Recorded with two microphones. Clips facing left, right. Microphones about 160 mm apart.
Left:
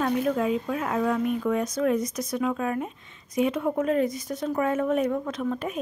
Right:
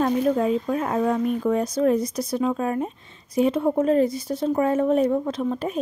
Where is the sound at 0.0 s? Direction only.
35° right (ahead or behind).